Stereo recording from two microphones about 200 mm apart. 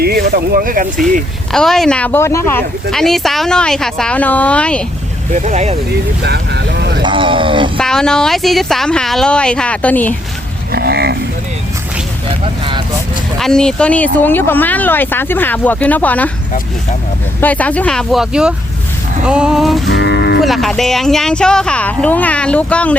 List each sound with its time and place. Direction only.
0.0 s speech: 50° right (ahead or behind)
1.5 s speech: centre (ahead or behind)
5.3 s speech: 35° right (ahead or behind)
6.2 s vehicle: 55° right (ahead or behind)
7.0 s a sound: 25° right (ahead or behind)
7.8 s speech: 5° left (ahead or behind)
10.7 s a sound: 50° right (ahead or behind)
13.4 s speech: 5° left (ahead or behind)
17.4 s speech: 5° left (ahead or behind)
19.9 s moo: 60° left (ahead or behind)
20.4 s speech: centre (ahead or behind)